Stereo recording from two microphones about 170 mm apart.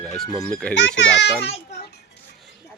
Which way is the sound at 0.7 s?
90° left.